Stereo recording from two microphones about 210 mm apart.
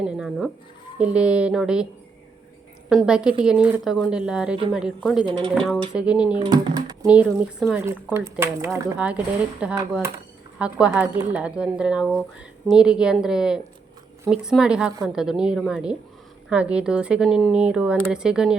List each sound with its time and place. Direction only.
0.0 s a woman's voice: centre (ahead or behind)
2.9 s a woman's voice: 5° right (ahead or behind)
6.4 s speech: 20° right (ahead or behind)
7.0 s a woman's voice: 5° right (ahead or behind)